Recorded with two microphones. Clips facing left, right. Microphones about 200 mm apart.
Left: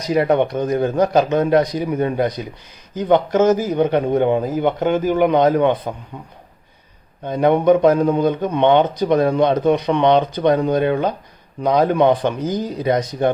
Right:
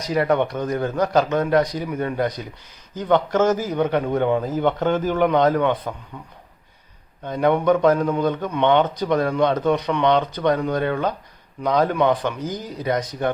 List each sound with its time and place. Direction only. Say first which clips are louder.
0.1 s a man's voice: left 4 dB; 20° left (ahead or behind)
7.3 s a man's voice: left 4 dB; 20° left (ahead or behind)